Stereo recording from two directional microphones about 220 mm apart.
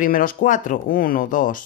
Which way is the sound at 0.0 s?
40° left (ahead or behind).